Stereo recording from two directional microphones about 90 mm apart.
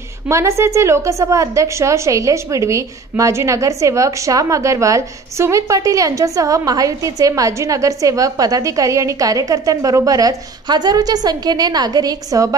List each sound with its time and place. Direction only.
0.3 s a woman's voice: 30° right (ahead or behind)